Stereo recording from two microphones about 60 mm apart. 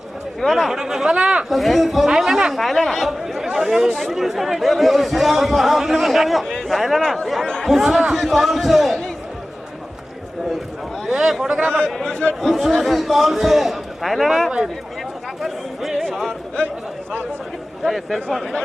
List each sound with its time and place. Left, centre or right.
0.5 s speech: centre
1.5 s speech: centre
11.1 s a sound: centre
11.9 s speech: centre
12.4 s speech: centre
17.8 s speech: centre